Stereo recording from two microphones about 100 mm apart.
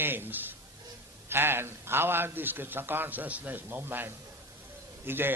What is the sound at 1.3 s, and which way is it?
A man's voice, 25° right (ahead or behind).